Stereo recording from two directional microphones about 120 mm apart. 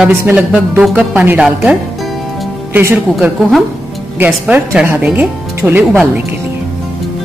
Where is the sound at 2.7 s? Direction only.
20° right (ahead or behind).